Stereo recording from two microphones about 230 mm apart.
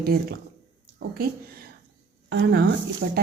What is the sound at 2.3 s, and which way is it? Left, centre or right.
Speech, right.